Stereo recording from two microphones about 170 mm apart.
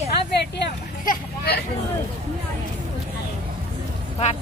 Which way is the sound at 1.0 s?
60° left (ahead or behind).